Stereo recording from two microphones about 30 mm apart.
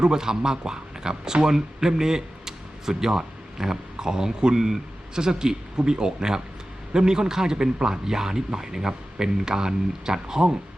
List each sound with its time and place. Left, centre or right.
0.0 s a man's voice: right